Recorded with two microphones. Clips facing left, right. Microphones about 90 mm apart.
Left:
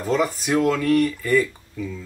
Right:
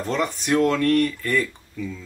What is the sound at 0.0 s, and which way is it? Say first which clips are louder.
Speech: left 3 dB; 5° left (ahead or behind).